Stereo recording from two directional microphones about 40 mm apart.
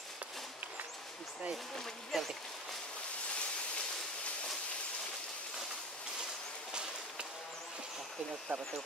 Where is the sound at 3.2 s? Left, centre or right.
Left.